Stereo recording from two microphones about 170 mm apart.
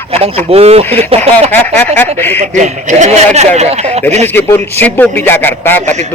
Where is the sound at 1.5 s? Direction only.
10° left (ahead or behind).